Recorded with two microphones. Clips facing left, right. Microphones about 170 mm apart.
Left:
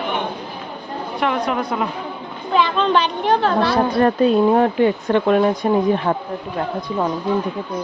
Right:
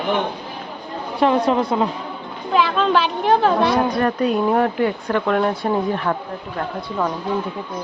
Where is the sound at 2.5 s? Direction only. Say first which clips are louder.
Even; 5° right (ahead or behind).